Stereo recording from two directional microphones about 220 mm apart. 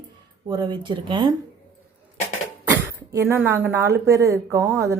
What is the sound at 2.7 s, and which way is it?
Speech, 15° right (ahead or behind).